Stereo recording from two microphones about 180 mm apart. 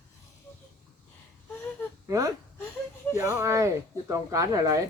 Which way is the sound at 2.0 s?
20° right (ahead or behind).